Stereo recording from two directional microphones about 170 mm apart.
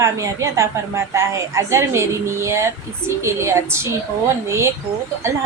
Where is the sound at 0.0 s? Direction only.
15° right (ahead or behind).